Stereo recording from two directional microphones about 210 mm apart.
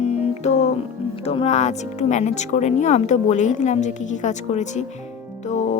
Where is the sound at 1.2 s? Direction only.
30° left (ahead or behind).